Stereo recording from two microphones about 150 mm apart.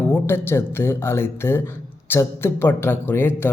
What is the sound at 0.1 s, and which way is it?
Speech, 15° left (ahead or behind).